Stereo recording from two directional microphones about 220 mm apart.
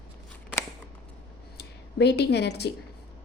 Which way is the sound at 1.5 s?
50° left (ahead or behind).